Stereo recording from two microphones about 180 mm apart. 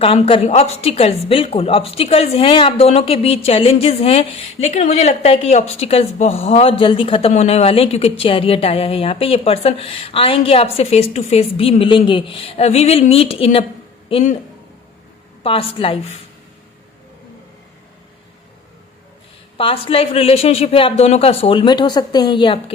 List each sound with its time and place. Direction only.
0.0 s speech: 30° left (ahead or behind)
15.4 s a woman's voice: 30° left (ahead or behind)
19.5 s speech: 30° left (ahead or behind)